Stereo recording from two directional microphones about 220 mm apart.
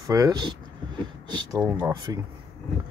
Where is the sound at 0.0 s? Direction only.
15° right (ahead or behind).